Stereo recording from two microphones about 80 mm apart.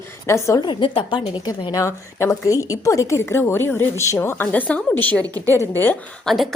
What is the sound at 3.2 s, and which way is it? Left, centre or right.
A woman's voice, left.